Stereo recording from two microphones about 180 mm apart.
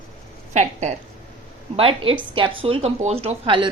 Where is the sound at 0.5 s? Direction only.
40° right (ahead or behind).